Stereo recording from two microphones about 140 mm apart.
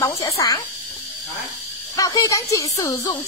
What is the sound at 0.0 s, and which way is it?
Speech, 25° left (ahead or behind).